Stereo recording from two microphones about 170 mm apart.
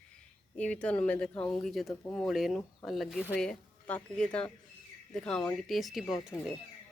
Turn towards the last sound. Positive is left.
turn(degrees=0)  # may be behind; listen again after turning